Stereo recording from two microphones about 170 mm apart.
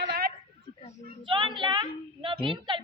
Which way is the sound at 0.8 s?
35° left (ahead or behind).